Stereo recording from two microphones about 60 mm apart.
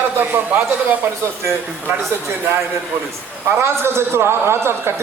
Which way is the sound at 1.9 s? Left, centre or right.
Right.